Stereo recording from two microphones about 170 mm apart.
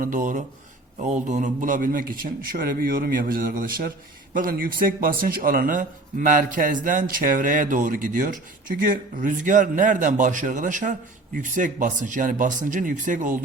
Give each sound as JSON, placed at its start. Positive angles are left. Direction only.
{"t": 0.0, "sound": "a man's voice", "side_deg": -50}